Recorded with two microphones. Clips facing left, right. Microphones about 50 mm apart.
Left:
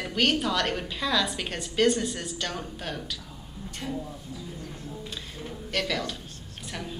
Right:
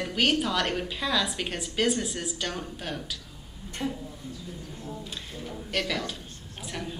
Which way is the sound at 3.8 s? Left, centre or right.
Centre.